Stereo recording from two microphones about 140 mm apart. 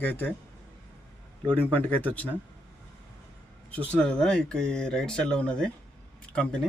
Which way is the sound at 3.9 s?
5° left (ahead or behind).